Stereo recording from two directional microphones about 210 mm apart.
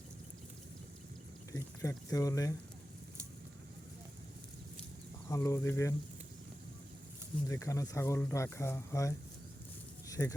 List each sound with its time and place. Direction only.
1.5 s speech: 15° left (ahead or behind)
5.3 s speech: 15° left (ahead or behind)
7.4 s speech: 15° left (ahead or behind)
10.1 s a sound: 15° left (ahead or behind)